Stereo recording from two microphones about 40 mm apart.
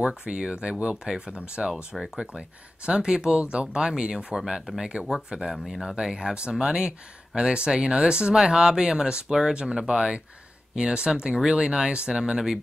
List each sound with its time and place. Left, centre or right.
0.0 s speech: right
2.0 s speech: centre
2.8 s speech: right; by 5.9 s centre
5.9 s speech: right